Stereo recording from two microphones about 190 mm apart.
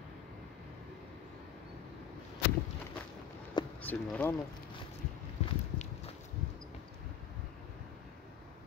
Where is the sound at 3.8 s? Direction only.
10° left (ahead or behind).